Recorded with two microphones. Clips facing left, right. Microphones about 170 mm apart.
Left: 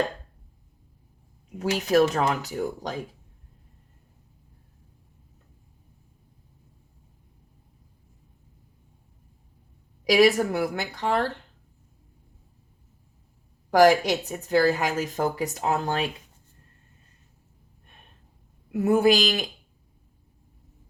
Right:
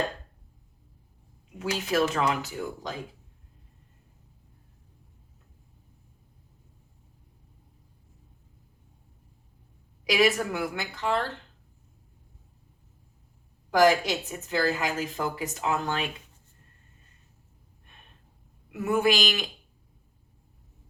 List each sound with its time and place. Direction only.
1.5 s a woman's voice: 40° left (ahead or behind)
10.0 s a woman's voice: 40° left (ahead or behind)
13.7 s a woman's voice: 40° left (ahead or behind)
18.7 s a woman's voice: 35° left (ahead or behind)